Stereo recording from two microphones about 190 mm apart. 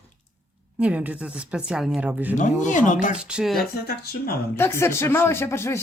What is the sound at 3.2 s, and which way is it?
Speech, 5° right (ahead or behind).